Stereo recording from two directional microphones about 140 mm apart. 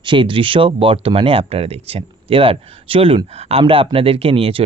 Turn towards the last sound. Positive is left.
turn(degrees=-40)  # may be behind; listen again after turning